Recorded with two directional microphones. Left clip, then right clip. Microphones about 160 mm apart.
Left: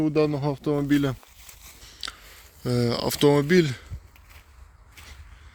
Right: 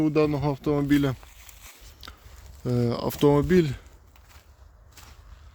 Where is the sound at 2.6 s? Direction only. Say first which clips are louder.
Left 2 dB; 10° right (ahead or behind).